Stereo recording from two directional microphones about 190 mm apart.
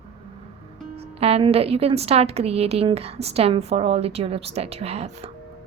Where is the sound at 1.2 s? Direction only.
30° right (ahead or behind).